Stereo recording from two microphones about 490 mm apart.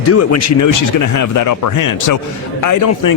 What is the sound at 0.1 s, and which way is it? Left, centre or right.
A man's voice, left.